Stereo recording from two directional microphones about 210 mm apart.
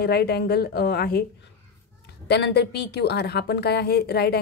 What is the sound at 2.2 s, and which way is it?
A woman's voice, 50° left (ahead or behind).